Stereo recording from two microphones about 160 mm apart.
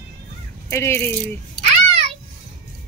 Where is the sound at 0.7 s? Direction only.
15° left (ahead or behind).